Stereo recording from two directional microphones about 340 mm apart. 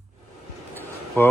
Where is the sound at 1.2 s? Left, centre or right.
Centre.